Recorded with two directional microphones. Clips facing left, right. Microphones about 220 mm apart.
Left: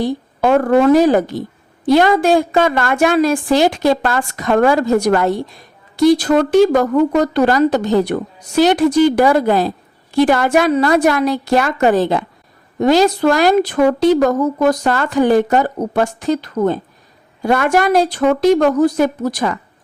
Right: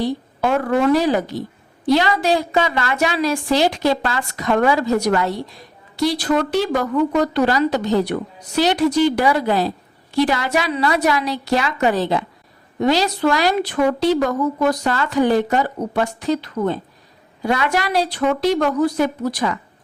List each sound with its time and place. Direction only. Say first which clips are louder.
0.0 s a woman's voice: left 4 dB; 50° left (ahead or behind)